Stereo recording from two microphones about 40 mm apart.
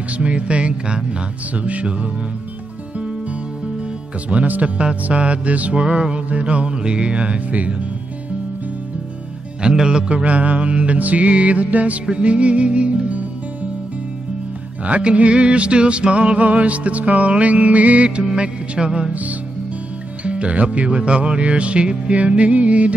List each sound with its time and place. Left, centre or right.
0.2 s music: right
1.5 s music: right
4.3 s music: right
6.2 s music: right
9.6 s music: right
14.9 s music: right
20.2 s music: right